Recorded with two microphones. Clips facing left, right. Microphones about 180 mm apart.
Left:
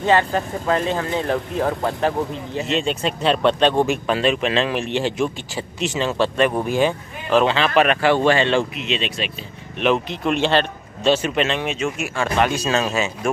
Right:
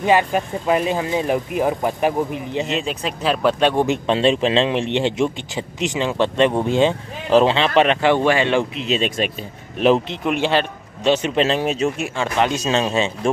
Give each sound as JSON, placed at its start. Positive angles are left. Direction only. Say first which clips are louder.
{"t": 0.0, "sound": "speech", "louder": "right 1 dB", "side_deg": -15}
{"t": 2.6, "sound": "speech", "louder": "left 5 dB", "side_deg": 0}
{"t": 3.8, "sound": "speech", "louder": "right 2 dB", "side_deg": -25}
{"t": 8.7, "sound": "speech", "louder": "right 4 dB", "side_deg": -40}
{"t": 10.2, "sound": "a man's voice", "louder": "left 3 dB", "side_deg": -10}
{"t": 11.2, "sound": "speech", "louder": "right 3 dB", "side_deg": -30}
{"t": 12.2, "sound": "speech", "louder": "left 1 dB", "side_deg": -20}